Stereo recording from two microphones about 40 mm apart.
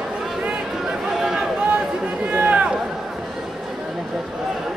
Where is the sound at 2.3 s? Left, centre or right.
Right.